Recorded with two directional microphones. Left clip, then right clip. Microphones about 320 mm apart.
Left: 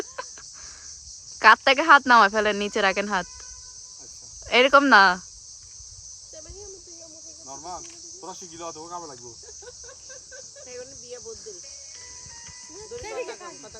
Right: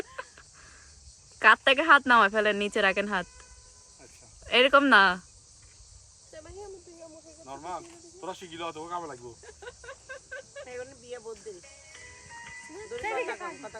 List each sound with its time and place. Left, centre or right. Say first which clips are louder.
1.4 s speech: left 4 dB; centre
4.4 s speech: left 4 dB; centre
7.5 s cricket: even; centre
8.8 s speech: right 1 dB; centre
10.7 s cricket: left 2 dB; centre
12.7 s speech: right 2 dB; centre